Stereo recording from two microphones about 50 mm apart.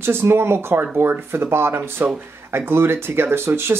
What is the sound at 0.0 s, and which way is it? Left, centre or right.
Speech, right.